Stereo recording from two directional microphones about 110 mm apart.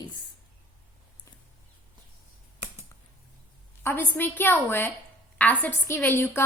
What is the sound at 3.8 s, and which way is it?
A woman's voice, 20° left (ahead or behind).